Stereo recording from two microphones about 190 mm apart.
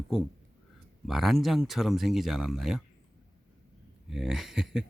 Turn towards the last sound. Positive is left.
turn(degrees=0)  # may be behind; listen again after turning